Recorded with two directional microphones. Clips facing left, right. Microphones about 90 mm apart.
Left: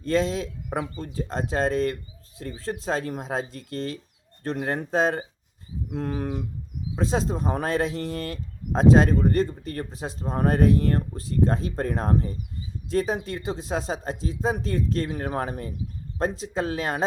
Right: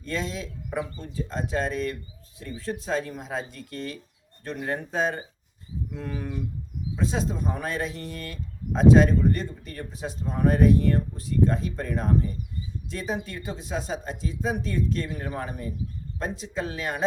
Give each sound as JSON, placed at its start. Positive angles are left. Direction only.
{"t": 0.0, "sound": "speech", "side_deg": 35}
{"t": 15.1, "sound": "speech", "side_deg": 55}
{"t": 16.1, "sound": "speech", "side_deg": 35}